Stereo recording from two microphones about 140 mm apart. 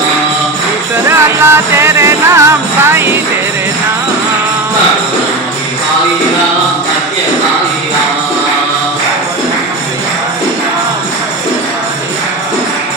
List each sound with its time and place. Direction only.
1.0 s music: 20° right (ahead or behind)